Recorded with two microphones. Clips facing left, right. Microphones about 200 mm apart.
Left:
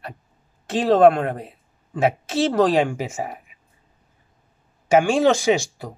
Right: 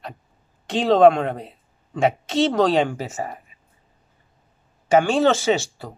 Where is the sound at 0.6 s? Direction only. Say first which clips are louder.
Even; 5° left (ahead or behind).